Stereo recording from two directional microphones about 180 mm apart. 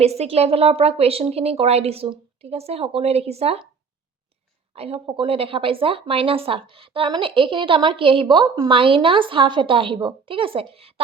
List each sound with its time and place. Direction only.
0.0 s a woman's voice: 35° right (ahead or behind)
4.7 s speech: 35° right (ahead or behind)